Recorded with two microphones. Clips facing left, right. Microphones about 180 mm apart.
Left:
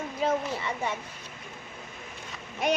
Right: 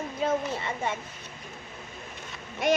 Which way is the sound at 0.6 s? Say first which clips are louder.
Even; 55° right (ahead or behind).